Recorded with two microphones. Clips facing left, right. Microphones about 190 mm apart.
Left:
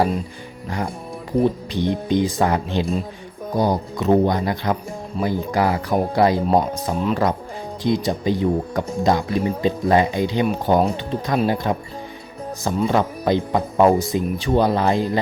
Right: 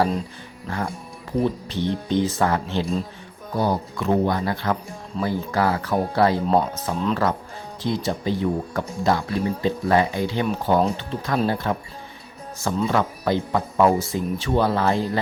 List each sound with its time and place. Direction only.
0.7 s speech: 15° left (ahead or behind)